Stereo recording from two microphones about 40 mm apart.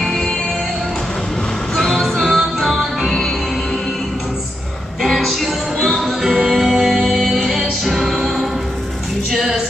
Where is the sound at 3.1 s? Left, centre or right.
Centre.